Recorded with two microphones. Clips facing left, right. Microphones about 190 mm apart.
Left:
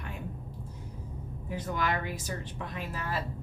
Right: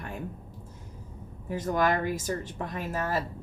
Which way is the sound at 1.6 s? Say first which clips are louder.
Right 6 dB; 45° right (ahead or behind).